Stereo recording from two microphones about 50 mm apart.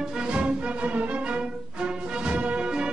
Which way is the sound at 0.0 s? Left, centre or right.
Centre.